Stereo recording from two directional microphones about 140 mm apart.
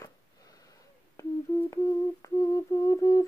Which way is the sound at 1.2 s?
20° left (ahead or behind).